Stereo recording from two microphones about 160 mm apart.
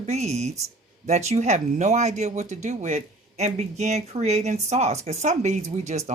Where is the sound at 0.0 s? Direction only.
45° right (ahead or behind).